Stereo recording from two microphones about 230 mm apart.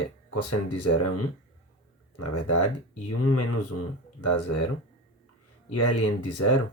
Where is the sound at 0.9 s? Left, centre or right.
Left.